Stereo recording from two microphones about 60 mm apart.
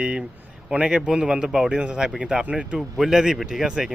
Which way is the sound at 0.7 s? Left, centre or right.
Centre.